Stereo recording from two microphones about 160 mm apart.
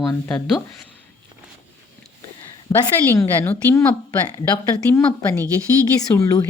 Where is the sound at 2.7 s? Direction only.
20° left (ahead or behind).